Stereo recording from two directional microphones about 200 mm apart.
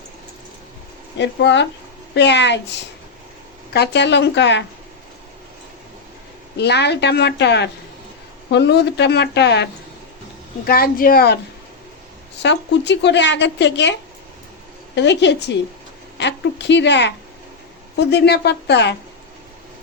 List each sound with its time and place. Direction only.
1.2 s a woman's voice: 60° left (ahead or behind)
6.6 s a woman's voice: 55° left (ahead or behind)
10.7 s speech: 50° left (ahead or behind)
12.4 s a woman's voice: 60° left (ahead or behind)
14.9 s a woman's voice: 60° left (ahead or behind)